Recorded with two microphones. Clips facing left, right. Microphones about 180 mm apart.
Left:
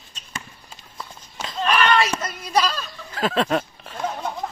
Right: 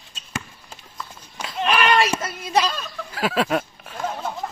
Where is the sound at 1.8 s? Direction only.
10° right (ahead or behind).